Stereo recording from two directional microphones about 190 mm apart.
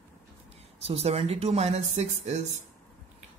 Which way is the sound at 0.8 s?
35° right (ahead or behind).